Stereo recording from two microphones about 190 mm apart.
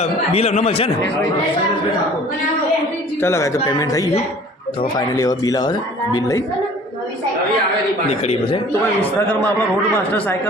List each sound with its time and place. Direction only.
0.0 s speech: 35° left (ahead or behind)
3.2 s speech: 15° left (ahead or behind)
8.2 s speech: 30° left (ahead or behind)